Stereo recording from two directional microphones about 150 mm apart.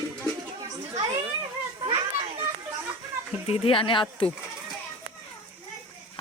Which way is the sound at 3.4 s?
40° left (ahead or behind).